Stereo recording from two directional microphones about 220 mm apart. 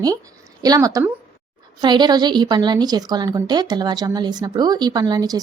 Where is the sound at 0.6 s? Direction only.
15° right (ahead or behind).